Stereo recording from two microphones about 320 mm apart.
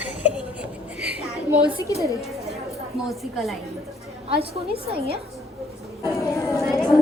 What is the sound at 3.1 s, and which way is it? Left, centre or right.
Speech, centre.